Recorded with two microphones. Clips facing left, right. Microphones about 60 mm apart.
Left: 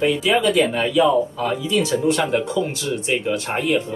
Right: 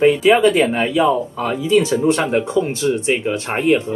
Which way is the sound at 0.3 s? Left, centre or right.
Right.